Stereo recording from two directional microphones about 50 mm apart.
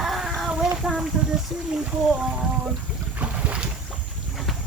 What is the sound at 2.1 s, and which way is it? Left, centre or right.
Speech, centre.